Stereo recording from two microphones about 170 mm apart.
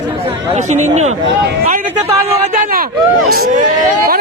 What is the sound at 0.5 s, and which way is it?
Speech, 45° right (ahead or behind).